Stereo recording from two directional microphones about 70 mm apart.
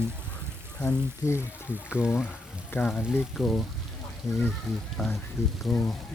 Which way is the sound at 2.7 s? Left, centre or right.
Left.